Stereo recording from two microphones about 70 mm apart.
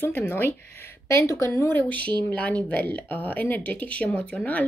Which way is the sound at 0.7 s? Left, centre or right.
Left.